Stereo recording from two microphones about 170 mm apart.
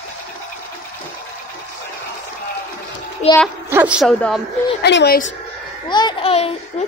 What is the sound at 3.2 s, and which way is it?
Speech, 40° left (ahead or behind).